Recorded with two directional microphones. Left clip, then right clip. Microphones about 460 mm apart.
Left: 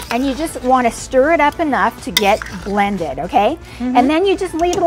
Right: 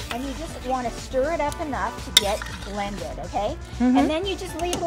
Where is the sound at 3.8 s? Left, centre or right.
Centre.